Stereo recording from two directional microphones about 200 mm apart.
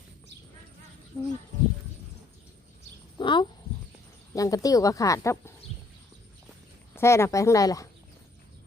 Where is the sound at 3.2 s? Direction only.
25° left (ahead or behind).